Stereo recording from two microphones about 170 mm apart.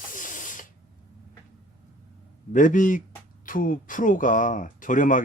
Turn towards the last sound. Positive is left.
turn(degrees=50)  # may be behind; listen again after turning